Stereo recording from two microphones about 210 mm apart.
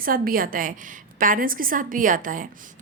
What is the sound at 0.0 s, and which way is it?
A woman's voice, 45° right (ahead or behind).